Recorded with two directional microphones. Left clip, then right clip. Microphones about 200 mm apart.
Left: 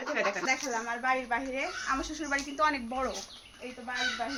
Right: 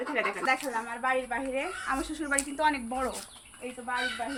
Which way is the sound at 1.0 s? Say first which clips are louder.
Right 1 dB; centre (ahead or behind).